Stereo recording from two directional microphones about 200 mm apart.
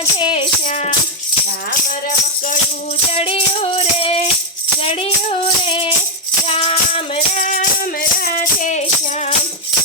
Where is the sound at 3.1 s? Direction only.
30° left (ahead or behind).